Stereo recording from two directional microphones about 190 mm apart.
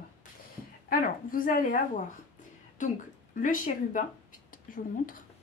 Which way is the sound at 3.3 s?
45° left (ahead or behind).